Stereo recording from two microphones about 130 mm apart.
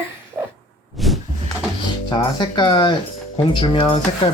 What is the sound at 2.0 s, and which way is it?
Speech, 35° left (ahead or behind).